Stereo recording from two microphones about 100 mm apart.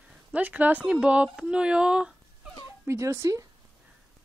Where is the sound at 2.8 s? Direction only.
30° right (ahead or behind).